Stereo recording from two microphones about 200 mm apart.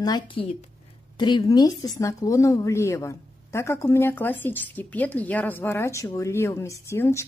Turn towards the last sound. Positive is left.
turn(degrees=15)  # may be behind; listen again after turning